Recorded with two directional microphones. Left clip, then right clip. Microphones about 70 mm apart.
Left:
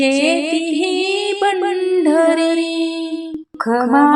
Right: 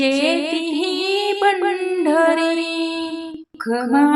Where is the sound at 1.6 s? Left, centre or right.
Centre.